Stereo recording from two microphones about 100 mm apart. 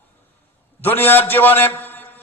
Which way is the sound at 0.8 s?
20° left (ahead or behind).